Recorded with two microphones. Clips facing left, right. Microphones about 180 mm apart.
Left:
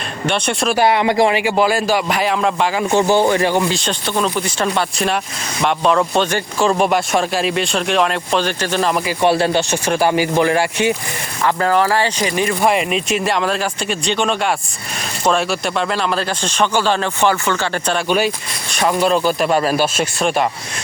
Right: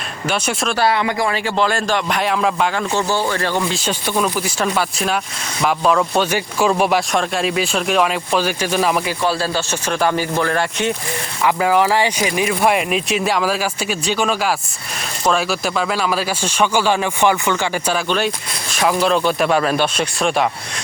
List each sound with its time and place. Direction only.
0.3 s speech: 5° right (ahead or behind)
0.9 s speech: 20° left (ahead or behind)
1.4 s speech: 10° left (ahead or behind)
2.9 s speech: 15° left (ahead or behind)
3.7 s speech: 5° right (ahead or behind)
9.2 s speech: 25° left (ahead or behind)
11.4 s speech: 10° right (ahead or behind)
18.7 s speech: centre (ahead or behind)